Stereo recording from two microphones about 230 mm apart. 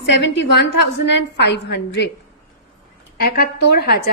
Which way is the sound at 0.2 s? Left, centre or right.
Left.